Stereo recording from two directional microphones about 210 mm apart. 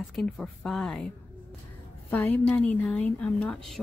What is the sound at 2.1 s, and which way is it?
Speech, 10° left (ahead or behind).